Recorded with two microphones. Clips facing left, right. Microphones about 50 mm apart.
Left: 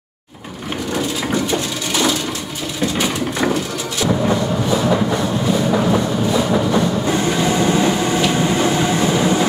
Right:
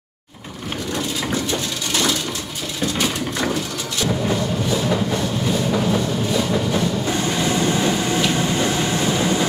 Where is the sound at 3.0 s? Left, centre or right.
Centre.